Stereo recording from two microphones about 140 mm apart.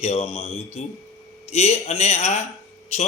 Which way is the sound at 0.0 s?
50° left (ahead or behind).